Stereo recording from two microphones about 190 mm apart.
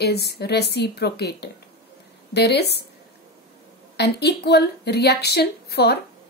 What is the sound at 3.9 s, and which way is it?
Speech, 60° left (ahead or behind).